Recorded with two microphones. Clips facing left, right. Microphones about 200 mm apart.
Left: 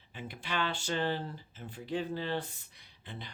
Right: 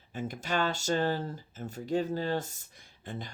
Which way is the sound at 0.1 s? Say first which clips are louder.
Right 6 dB; 45° right (ahead or behind).